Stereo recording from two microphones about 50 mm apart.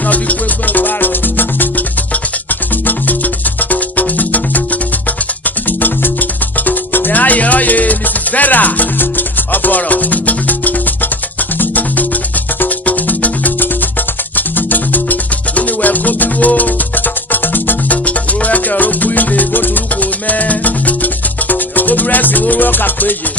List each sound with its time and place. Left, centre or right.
0.1 s music: left